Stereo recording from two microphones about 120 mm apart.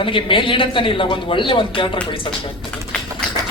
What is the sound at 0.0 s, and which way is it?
A woman's voice, 45° left (ahead or behind).